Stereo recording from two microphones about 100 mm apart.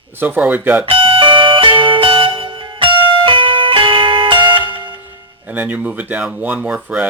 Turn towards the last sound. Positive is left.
turn(degrees=-10)  # may be behind; listen again after turning